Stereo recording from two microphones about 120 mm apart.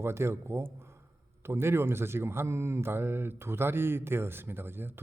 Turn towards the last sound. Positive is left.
turn(degrees=-20)  # may be behind; listen again after turning